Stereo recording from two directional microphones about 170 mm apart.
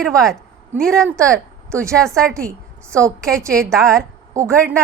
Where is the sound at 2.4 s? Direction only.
15° right (ahead or behind).